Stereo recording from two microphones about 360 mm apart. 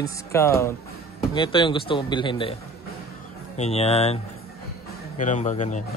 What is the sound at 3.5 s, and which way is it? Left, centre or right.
Speech, centre.